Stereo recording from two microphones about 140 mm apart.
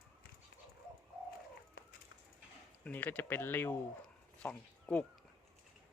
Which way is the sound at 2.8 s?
10° left (ahead or behind).